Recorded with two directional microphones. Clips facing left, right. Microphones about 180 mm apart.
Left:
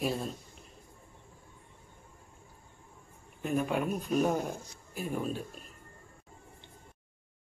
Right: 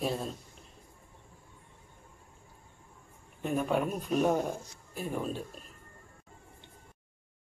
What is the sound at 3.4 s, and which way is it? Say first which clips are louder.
Speech: right 1 dB; 5° left (ahead or behind).